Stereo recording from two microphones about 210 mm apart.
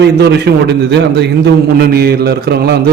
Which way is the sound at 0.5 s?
50° right (ahead or behind).